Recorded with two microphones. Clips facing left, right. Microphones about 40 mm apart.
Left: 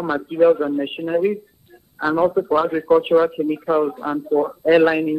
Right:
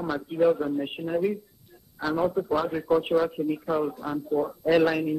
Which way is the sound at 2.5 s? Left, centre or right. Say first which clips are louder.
Left 8 dB; left.